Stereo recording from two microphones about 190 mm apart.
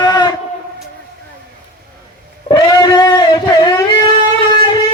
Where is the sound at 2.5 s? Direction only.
25° left (ahead or behind).